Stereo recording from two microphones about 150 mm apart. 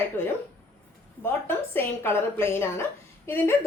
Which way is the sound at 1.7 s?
15° left (ahead or behind).